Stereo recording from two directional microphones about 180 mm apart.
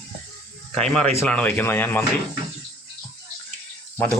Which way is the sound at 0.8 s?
5° left (ahead or behind).